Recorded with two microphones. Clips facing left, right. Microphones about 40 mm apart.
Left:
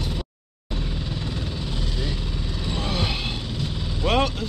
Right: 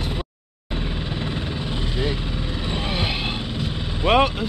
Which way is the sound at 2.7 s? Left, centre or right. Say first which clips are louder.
Right 1 dB; right.